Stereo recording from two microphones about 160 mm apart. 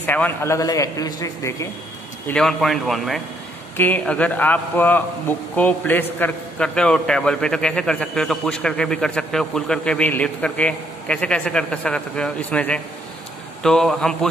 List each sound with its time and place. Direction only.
0.0 s speech: 10° left (ahead or behind)
2.2 s a man's voice: 5° left (ahead or behind)
3.7 s a man's voice: 10° left (ahead or behind)